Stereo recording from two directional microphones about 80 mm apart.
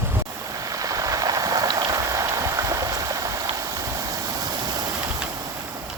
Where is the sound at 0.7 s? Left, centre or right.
Right.